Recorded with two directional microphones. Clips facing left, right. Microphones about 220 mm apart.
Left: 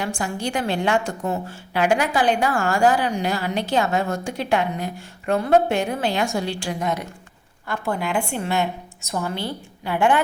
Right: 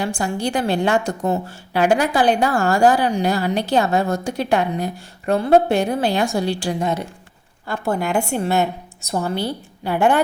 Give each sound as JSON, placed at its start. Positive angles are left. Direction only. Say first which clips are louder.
{"t": 0.0, "sound": "a woman's voice", "louder": "right 4 dB", "side_deg": -35}
{"t": 7.7, "sound": "a woman's voice", "louder": "right 3 dB", "side_deg": -40}